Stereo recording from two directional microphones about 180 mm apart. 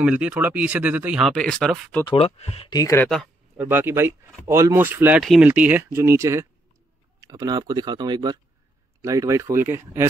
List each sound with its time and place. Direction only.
0.0 s speech: 5° right (ahead or behind)
2.0 s speech: 35° left (ahead or behind)
2.7 s speech: 20° left (ahead or behind)
3.5 s speech: 10° right (ahead or behind)